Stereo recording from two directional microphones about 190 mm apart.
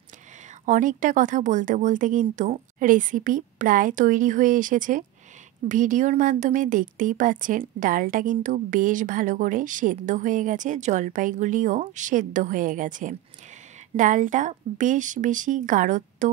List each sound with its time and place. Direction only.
0.7 s a woman's voice: 45° right (ahead or behind)